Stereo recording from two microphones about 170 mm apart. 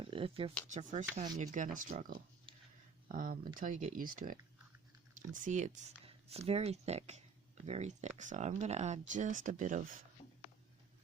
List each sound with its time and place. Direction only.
0.0 s speech: 30° right (ahead or behind)
0.7 s speech: 45° right (ahead or behind)